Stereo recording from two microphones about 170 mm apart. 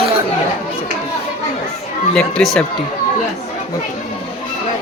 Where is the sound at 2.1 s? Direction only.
5° left (ahead or behind).